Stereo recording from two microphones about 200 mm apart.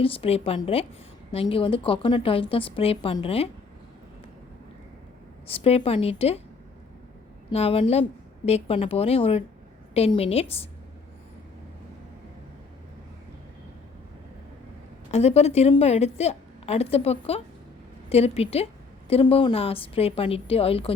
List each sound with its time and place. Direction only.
0.0 s a woman's voice: 30° left (ahead or behind)
5.5 s a woman's voice: 30° left (ahead or behind)
7.5 s a woman's voice: 30° left (ahead or behind)
15.1 s a woman's voice: 30° left (ahead or behind)